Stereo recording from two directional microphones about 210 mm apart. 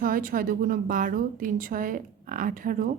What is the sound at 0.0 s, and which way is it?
A woman's voice, 40° right (ahead or behind).